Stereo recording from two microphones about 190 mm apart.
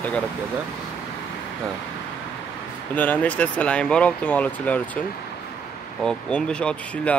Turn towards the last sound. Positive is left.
turn(degrees=5)  # may be behind; listen again after turning